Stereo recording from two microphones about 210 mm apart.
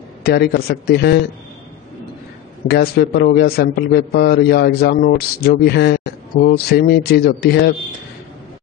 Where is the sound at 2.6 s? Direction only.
50° left (ahead or behind).